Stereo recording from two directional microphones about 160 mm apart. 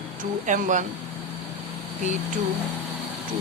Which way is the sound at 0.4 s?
50° right (ahead or behind).